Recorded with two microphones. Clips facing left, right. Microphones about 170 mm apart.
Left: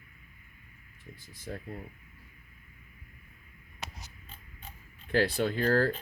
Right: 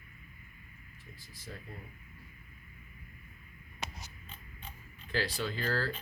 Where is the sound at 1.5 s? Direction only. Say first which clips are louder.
Left 7 dB; 55° left (ahead or behind).